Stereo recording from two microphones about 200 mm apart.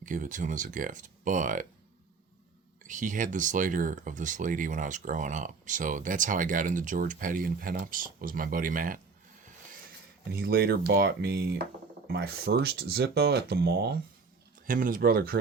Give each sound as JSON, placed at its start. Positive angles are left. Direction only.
{"t": 0.0, "sound": "speech", "side_deg": -40}
{"t": 2.8, "sound": "speech", "side_deg": -40}
{"t": 10.3, "sound": "speech", "side_deg": -50}